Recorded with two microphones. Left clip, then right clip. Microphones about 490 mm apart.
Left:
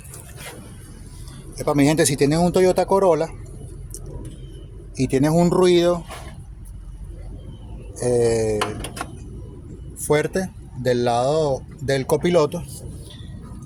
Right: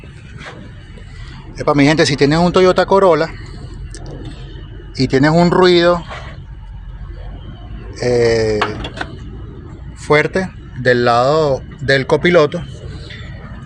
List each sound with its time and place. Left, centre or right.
1.5 s speech: left
5.2 s speech: left
8.0 s speech: left
10.0 s speech: left